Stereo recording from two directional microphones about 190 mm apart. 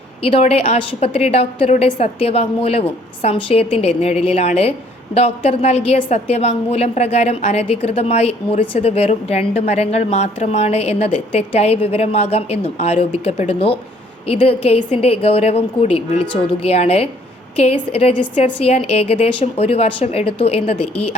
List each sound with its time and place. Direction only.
0.2 s a woman's voice: 30° left (ahead or behind)